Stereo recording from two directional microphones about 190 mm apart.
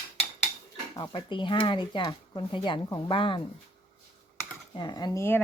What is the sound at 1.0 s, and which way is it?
Speech, 25° left (ahead or behind).